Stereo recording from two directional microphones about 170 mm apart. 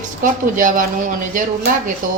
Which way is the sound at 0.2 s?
50° right (ahead or behind).